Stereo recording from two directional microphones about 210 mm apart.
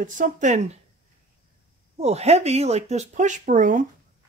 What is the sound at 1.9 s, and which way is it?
Speech, 30° right (ahead or behind).